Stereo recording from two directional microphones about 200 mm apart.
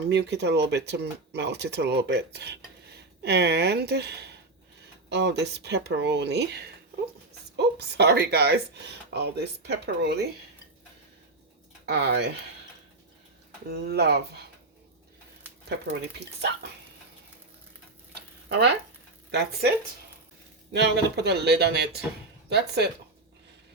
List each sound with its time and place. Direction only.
0.1 s speech: 55° right (ahead or behind)
11.9 s speech: 55° right (ahead or behind)
13.7 s speech: 55° right (ahead or behind)
15.7 s speech: 55° right (ahead or behind)
18.4 s speech: 55° right (ahead or behind)
20.7 s speech: 55° right (ahead or behind)